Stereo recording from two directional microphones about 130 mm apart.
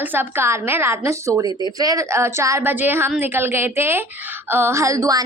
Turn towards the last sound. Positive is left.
turn(degrees=-30)  # may be behind; listen again after turning